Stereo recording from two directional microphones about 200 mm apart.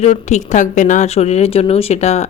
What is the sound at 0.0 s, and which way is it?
A woman's voice, 35° left (ahead or behind).